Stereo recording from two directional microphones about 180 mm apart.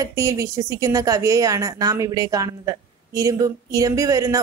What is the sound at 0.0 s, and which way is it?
A woman's voice, 20° right (ahead or behind).